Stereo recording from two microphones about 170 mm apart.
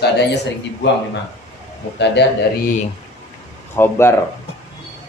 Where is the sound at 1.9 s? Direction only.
90° left.